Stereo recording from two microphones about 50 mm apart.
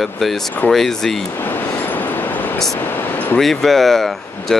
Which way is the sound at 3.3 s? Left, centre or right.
Centre.